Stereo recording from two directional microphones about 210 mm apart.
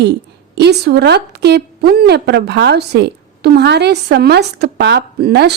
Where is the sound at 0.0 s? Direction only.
55° right (ahead or behind).